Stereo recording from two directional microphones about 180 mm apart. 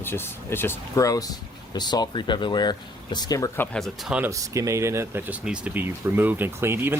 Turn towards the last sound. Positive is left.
turn(degrees=-10)  # may be behind; listen again after turning